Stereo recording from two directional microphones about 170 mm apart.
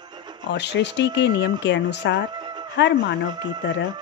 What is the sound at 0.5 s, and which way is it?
Speech, 90° left.